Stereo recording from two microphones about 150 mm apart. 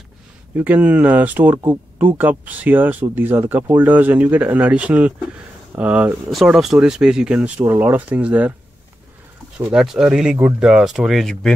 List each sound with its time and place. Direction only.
0.6 s speech: 10° right (ahead or behind)
6.3 s speech: centre (ahead or behind)
9.7 s speech: 5° right (ahead or behind)